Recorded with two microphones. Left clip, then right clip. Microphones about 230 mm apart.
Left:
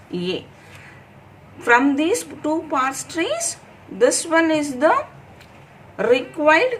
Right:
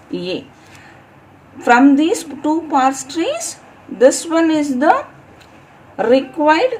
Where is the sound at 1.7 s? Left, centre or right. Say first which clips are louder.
Right 5 dB; right.